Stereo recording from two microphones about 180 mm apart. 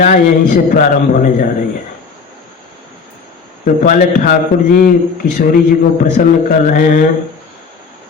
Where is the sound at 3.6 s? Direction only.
45° left (ahead or behind).